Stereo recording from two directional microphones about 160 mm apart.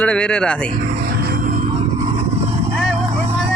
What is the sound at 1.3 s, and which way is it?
Music, 60° right (ahead or behind).